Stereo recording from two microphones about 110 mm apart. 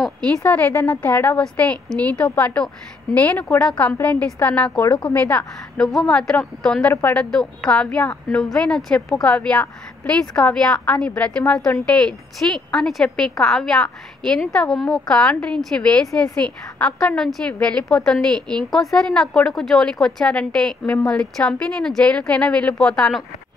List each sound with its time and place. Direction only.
0.4 s a woman's voice: 15° left (ahead or behind)
7.2 s a woman's voice: 5° left (ahead or behind)